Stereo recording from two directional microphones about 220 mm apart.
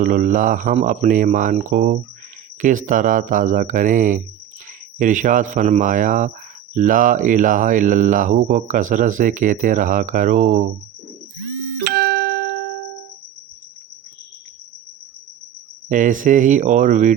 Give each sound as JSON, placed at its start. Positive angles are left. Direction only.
{"t": 0.0, "sound": "speech", "side_deg": -35}
{"t": 11.8, "sound": "music", "side_deg": -45}
{"t": 15.9, "sound": "speech", "side_deg": -35}